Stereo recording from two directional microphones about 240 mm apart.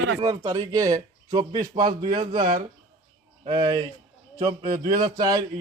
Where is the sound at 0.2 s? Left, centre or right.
Centre.